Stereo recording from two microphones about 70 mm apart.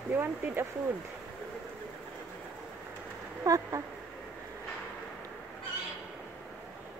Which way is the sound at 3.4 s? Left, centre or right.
Right.